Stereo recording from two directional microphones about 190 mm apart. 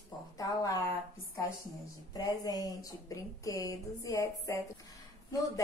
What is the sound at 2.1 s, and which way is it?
A woman's voice, 20° left (ahead or behind).